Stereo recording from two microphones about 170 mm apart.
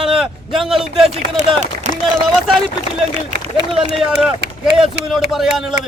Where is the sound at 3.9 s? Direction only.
5° right (ahead or behind).